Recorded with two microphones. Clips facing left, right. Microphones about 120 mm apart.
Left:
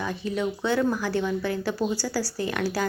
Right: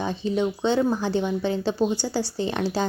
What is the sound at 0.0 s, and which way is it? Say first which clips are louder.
A woman's voice: right 3 dB; 25° right (ahead or behind).